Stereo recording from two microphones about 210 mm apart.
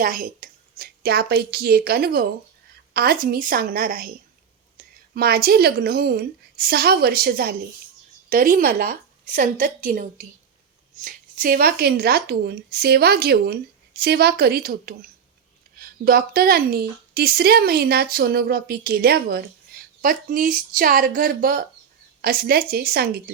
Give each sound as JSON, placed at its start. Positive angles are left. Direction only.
{"t": 0.0, "sound": "a woman's voice", "side_deg": -40}